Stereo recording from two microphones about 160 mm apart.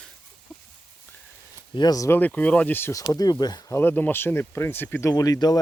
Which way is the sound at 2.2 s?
10° left (ahead or behind).